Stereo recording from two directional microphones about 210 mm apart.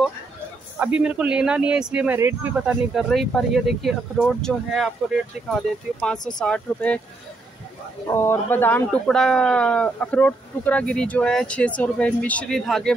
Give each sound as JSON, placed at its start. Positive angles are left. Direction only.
{"t": 0.7, "sound": "speech", "side_deg": -5}
{"t": 6.1, "sound": "speech", "side_deg": 20}
{"t": 6.4, "sound": "speech", "side_deg": 5}
{"t": 8.1, "sound": "speech", "side_deg": 10}